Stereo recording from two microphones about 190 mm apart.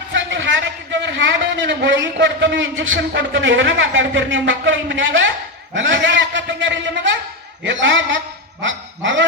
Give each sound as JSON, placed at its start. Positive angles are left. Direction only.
{"t": 0.1, "sound": "a sound", "side_deg": -75}
{"t": 1.0, "sound": "a man's voice", "side_deg": -70}
{"t": 3.1, "sound": "a man's voice", "side_deg": -70}
{"t": 8.6, "sound": "dog", "side_deg": -75}